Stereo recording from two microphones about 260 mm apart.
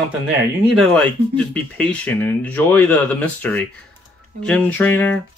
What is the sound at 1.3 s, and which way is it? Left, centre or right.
Speech, centre.